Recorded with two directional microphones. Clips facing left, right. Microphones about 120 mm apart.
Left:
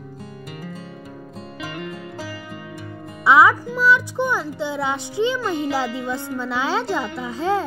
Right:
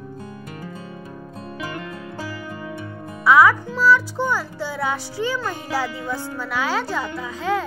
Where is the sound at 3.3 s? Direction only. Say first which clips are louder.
Even; 25° left (ahead or behind).